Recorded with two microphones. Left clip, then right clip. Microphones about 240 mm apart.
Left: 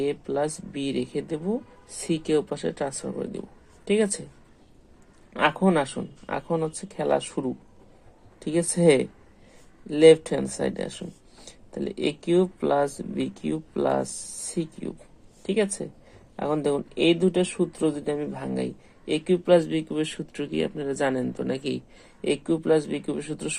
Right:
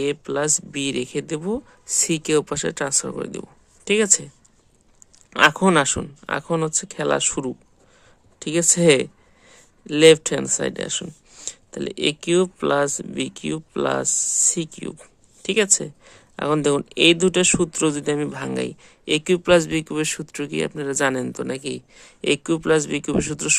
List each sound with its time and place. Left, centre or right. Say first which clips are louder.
0.0 s speech: right 3 dB; right
5.3 s speech: right 7 dB; right